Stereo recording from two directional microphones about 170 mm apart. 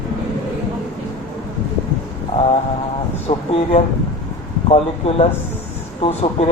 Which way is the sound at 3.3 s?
35° left (ahead or behind).